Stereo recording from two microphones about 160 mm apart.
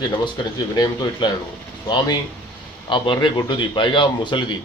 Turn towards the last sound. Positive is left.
turn(degrees=30)  # may be behind; listen again after turning